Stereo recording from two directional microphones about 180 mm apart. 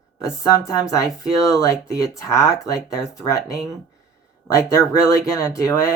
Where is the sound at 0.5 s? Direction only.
15° left (ahead or behind).